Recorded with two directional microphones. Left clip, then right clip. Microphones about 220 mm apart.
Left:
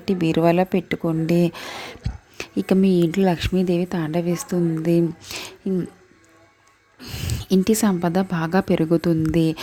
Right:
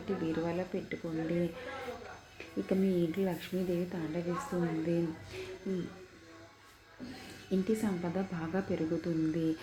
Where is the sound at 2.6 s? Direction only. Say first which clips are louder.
Left 13 dB; 55° left (ahead or behind).